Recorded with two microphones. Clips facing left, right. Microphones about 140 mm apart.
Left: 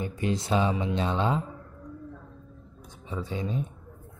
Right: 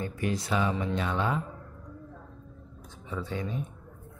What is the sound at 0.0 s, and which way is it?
Music, 20° left (ahead or behind).